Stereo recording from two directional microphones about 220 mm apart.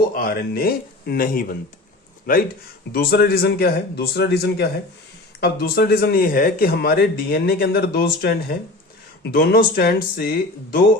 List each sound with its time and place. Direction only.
0.1 s speech: 40° left (ahead or behind)